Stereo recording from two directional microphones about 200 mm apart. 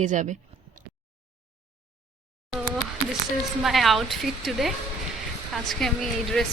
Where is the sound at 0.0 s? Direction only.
40° right (ahead or behind).